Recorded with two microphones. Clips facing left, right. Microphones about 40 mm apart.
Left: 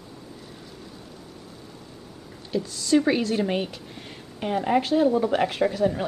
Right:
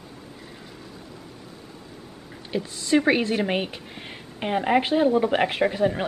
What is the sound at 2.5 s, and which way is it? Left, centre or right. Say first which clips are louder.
A woman's voice: even; right.